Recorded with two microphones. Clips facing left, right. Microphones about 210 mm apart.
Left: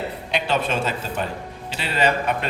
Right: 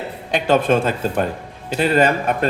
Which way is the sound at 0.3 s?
50° right (ahead or behind).